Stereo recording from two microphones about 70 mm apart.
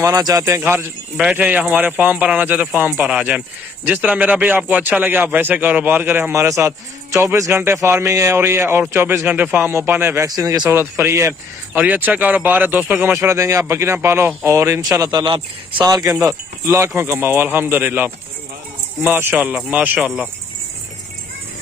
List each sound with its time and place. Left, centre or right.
0.1 s a man's voice: right
0.7 s a man's voice: right
1.3 s speech: right
6.3 s a man's voice: right
9.3 s a man's voice: right
10.2 s speech: right
10.7 s a man's voice: right
11.7 s a man's voice: right
14.4 s speech: right
15.8 s speech: right
16.6 s a man's voice: right
19.5 s speech: right